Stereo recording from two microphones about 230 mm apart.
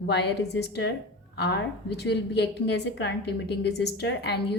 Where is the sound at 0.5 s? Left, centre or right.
Left.